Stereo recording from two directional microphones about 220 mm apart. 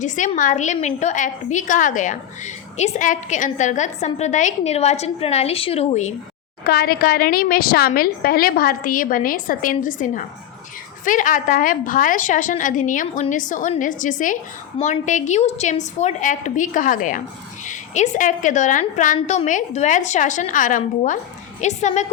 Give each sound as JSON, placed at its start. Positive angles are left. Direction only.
{"t": 0.0, "sound": "a woman's voice", "side_deg": 35}
{"t": 6.7, "sound": "a woman's voice", "side_deg": 45}